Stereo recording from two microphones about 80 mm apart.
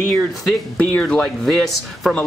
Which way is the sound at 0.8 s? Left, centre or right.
Centre.